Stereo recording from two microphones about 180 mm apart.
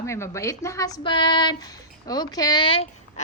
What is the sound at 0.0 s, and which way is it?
A woman's voice, 15° left (ahead or behind).